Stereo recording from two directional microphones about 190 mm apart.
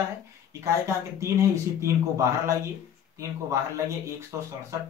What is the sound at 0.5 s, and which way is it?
Speech, 15° right (ahead or behind).